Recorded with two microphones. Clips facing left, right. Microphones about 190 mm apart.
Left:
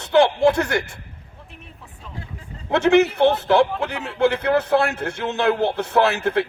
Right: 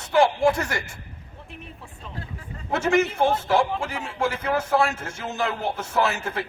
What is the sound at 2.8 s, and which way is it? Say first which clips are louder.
A man's voice: left 6 dB; 65° left (ahead or behind).